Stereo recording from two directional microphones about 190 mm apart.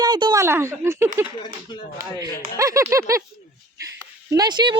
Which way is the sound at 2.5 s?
15° right (ahead or behind).